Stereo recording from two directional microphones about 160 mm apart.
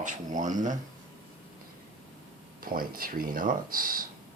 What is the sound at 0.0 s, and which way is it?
Speech, 55° right (ahead or behind).